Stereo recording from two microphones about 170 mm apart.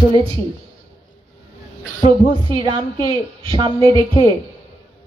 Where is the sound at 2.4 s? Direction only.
30° right (ahead or behind).